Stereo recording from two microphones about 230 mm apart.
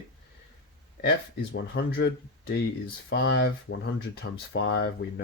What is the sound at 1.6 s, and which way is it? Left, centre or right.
Speech, left.